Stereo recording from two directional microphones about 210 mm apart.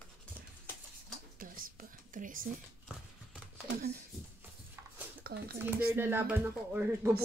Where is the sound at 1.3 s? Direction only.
40° right (ahead or behind).